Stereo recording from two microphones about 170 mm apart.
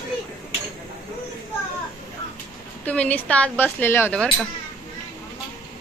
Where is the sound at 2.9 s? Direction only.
10° left (ahead or behind).